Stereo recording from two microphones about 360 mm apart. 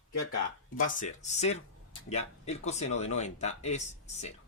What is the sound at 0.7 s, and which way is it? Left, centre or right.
Speech, left.